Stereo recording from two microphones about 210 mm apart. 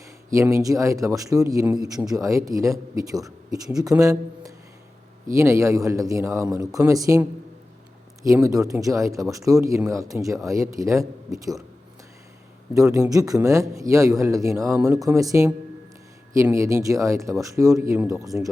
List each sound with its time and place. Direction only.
0.3 s speech: 15° right (ahead or behind)
12.7 s speech: 15° right (ahead or behind)